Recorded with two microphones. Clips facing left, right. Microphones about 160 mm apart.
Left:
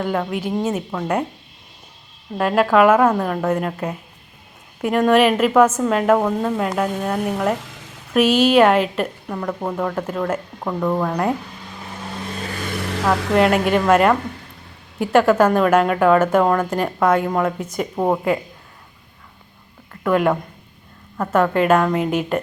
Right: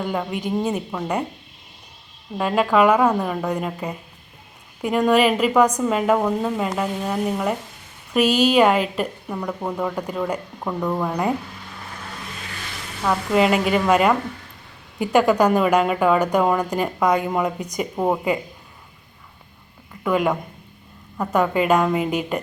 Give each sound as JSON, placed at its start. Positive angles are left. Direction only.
{"t": 0.0, "sound": "a woman's voice", "side_deg": 0}
{"t": 2.4, "sound": "a woman's voice", "side_deg": 0}
{"t": 8.4, "sound": "a woman's voice", "side_deg": 5}
{"t": 12.4, "sound": "vehicle", "side_deg": 50}
{"t": 12.8, "sound": "vehicle", "side_deg": 90}
{"t": 13.3, "sound": "a woman's voice", "side_deg": 0}
{"t": 19.9, "sound": "speech", "side_deg": 0}
{"t": 21.3, "sound": "a woman's voice", "side_deg": -5}